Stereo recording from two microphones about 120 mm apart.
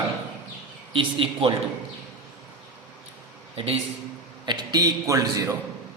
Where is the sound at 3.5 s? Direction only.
55° right (ahead or behind).